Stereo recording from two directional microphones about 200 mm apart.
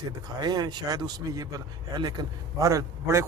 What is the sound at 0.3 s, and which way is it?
A man's voice, 20° right (ahead or behind).